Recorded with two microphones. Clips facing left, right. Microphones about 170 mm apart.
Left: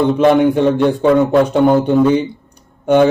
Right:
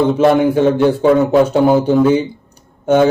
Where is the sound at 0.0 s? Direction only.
5° right (ahead or behind).